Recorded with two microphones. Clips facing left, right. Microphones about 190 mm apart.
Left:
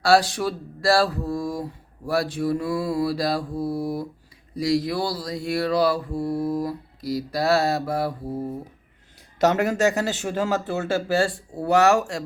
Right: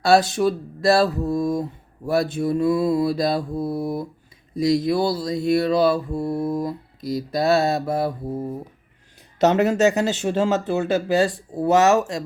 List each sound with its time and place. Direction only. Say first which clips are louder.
0.0 s mantra: right 2 dB; 20° right (ahead or behind)
9.4 s mantra: right 3 dB; 20° right (ahead or behind)